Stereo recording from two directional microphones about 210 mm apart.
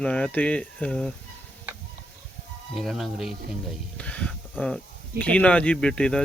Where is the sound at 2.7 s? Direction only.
Centre (ahead or behind).